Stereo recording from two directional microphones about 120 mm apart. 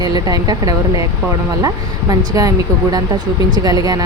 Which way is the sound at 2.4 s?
30° right (ahead or behind).